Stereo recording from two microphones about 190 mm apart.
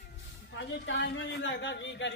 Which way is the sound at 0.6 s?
70° left (ahead or behind).